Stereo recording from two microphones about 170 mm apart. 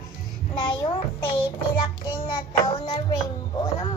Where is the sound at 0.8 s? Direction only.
30° left (ahead or behind).